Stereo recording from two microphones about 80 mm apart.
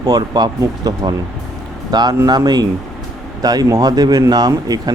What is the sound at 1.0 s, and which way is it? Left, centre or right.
Speech, right.